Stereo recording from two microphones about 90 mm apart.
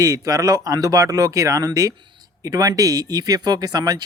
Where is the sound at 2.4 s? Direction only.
45° right (ahead or behind).